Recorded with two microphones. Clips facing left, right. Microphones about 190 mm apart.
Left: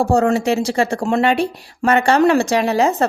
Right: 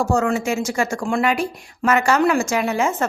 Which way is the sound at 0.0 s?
35° left (ahead or behind).